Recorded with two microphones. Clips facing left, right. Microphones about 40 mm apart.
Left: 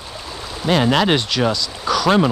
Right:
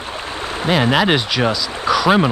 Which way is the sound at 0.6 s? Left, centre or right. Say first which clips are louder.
Even; centre.